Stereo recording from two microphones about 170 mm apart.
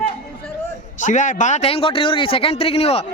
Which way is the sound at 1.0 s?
50° left (ahead or behind).